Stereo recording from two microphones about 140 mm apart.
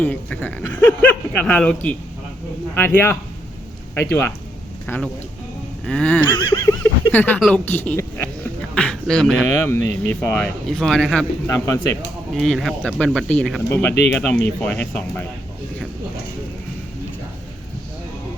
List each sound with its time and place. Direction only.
0.0 s speech: 10° left (ahead or behind)
5.8 s speech: 5° left (ahead or behind)
6.3 s a sound: 30° left (ahead or behind)
7.1 s speech: 15° left (ahead or behind)
7.6 s speech: 15° left (ahead or behind)
8.7 s a sound: 5° left (ahead or behind)
9.6 s speech: 15° left (ahead or behind)
10.7 s speech: centre (ahead or behind)
11.4 s speech: 20° left (ahead or behind)
12.3 s speech: centre (ahead or behind)